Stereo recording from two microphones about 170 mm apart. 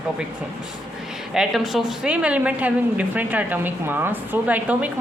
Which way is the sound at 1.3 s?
Centre (ahead or behind).